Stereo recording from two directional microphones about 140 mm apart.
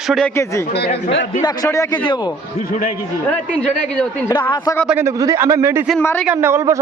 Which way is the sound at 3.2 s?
10° left (ahead or behind).